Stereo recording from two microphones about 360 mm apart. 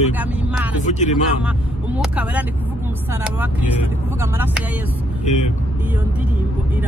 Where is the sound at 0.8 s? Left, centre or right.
Centre.